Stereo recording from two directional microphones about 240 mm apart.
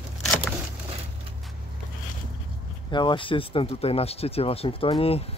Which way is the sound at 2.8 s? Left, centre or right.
Centre.